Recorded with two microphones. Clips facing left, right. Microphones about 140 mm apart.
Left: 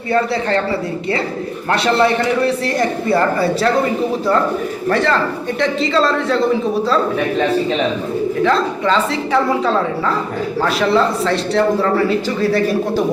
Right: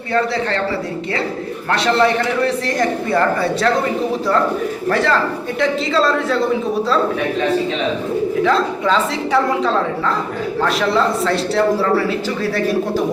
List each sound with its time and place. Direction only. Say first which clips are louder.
1.7 s a man's voice: left 1 dB; 5° left (ahead or behind)
3.1 s a man's voice: left 4 dB; 5° left (ahead or behind)
4.9 s a man's voice: left 1 dB; centre (ahead or behind)
8.4 s a man's voice: left 2 dB; centre (ahead or behind)